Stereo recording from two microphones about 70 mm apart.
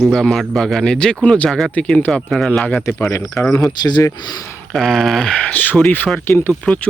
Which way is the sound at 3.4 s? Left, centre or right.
Left.